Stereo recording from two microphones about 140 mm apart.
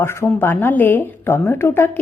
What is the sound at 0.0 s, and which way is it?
A woman's voice, 20° left (ahead or behind).